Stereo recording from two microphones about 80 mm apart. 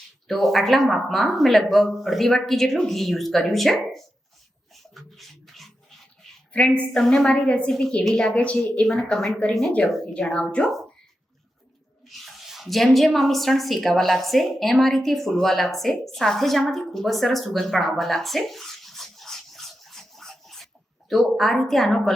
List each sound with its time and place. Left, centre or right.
0.3 s speech: centre
4.7 s bathtub: centre
6.5 s a woman's voice: centre
12.0 s speech: centre